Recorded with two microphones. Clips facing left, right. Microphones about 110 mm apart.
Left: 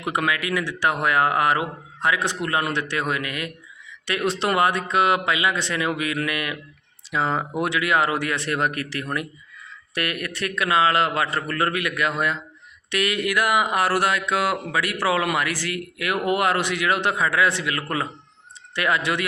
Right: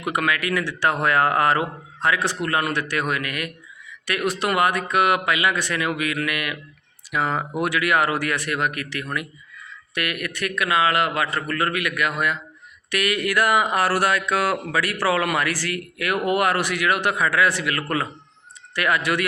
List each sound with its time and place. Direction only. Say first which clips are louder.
0.0 s speech: right 1 dB; 25° left (ahead or behind)